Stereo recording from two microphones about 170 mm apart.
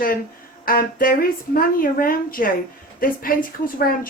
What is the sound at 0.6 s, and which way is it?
Speech, 55° left (ahead or behind).